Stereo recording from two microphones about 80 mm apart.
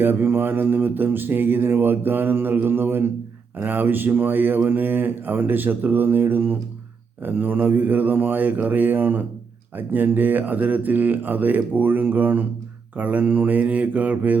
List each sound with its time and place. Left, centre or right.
0.0 s mantra: right